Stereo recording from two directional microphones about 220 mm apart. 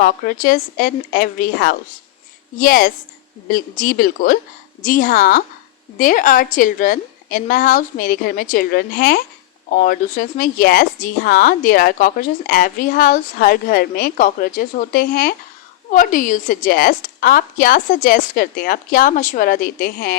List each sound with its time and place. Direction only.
0.0 s speech: 40° left (ahead or behind)